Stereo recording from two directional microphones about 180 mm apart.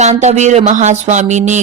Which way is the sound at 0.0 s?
40° right (ahead or behind).